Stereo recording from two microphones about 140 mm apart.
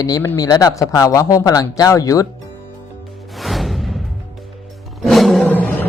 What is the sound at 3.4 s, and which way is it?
Music, centre (ahead or behind).